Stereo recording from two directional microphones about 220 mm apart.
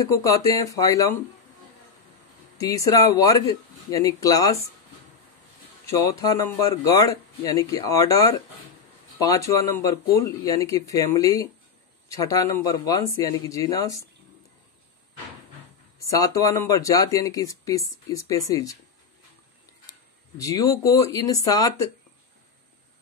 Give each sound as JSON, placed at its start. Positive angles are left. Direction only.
{"t": 0.0, "sound": "speech", "side_deg": 15}
{"t": 2.5, "sound": "speech", "side_deg": 15}
{"t": 5.9, "sound": "speech", "side_deg": 15}
{"t": 16.0, "sound": "speech", "side_deg": 15}
{"t": 20.3, "sound": "speech", "side_deg": 15}